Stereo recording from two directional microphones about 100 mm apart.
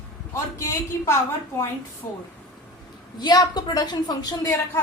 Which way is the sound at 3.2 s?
45° left (ahead or behind).